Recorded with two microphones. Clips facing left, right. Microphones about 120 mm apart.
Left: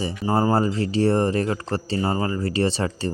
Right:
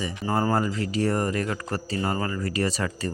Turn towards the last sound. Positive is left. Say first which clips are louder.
# left 4 dB
turn(degrees=30)  # may be behind; listen again after turning